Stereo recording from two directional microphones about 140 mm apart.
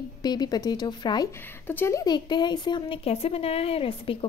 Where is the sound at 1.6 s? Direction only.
15° left (ahead or behind).